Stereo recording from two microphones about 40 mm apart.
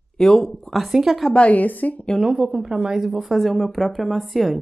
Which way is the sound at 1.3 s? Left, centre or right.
Left.